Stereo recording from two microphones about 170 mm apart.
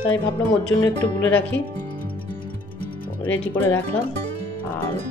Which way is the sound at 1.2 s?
10° left (ahead or behind).